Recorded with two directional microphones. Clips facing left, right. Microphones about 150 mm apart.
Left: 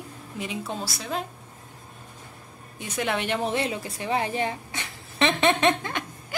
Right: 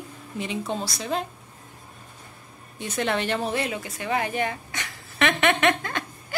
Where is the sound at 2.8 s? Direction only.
5° left (ahead or behind); by 5.9 s 30° left (ahead or behind).